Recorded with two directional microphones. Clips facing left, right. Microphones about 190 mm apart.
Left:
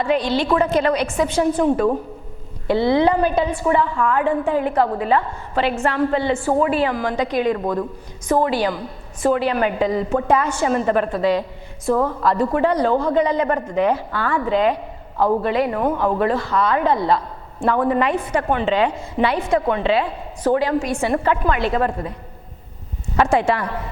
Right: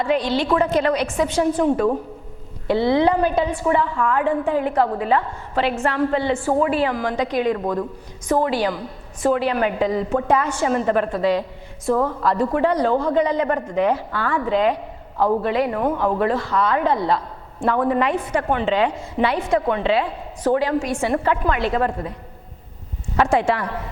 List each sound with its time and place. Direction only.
0.0 s a woman's voice: 15° left (ahead or behind)
2.6 s a woman's voice: 15° left (ahead or behind)
7.6 s speech: 25° left (ahead or behind)
8.3 s a woman's voice: 15° left (ahead or behind)
11.9 s a woman's voice: 30° left (ahead or behind)
15.2 s speech: 30° left (ahead or behind)
15.4 s a woman's voice: 15° left (ahead or behind)
23.1 s speech: 15° left (ahead or behind)